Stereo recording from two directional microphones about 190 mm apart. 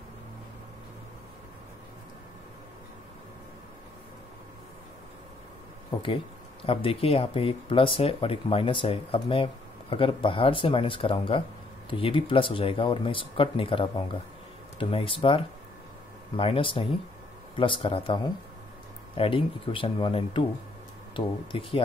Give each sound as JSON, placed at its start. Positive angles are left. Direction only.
{"t": 5.9, "sound": "speech", "side_deg": 25}